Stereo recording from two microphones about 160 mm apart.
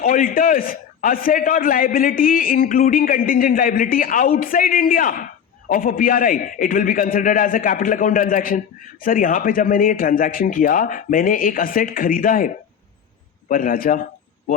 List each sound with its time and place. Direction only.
0.0 s a man's voice: 60° left (ahead or behind)